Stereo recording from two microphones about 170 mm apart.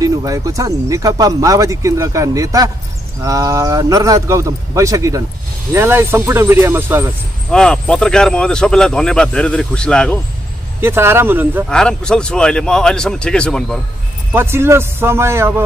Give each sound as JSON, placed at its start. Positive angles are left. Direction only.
{"t": 0.0, "sound": "speech", "side_deg": -20}
{"t": 7.5, "sound": "speech", "side_deg": 5}
{"t": 10.8, "sound": "speech", "side_deg": -15}
{"t": 11.7, "sound": "speech", "side_deg": 5}
{"t": 14.3, "sound": "speech", "side_deg": -15}